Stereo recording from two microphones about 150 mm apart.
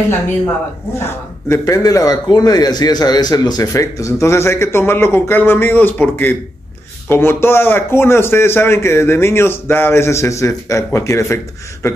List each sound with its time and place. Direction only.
0.9 s a man's voice: 15° left (ahead or behind)